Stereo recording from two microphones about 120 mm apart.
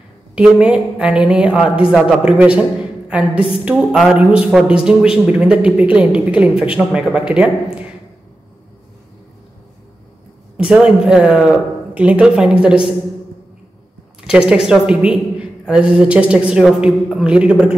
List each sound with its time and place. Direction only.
0.4 s a woman's voice: 10° right (ahead or behind)
3.6 s a woman's voice: 5° right (ahead or behind)
10.6 s a woman's voice: 5° right (ahead or behind)
14.2 s a woman's voice: 5° right (ahead or behind)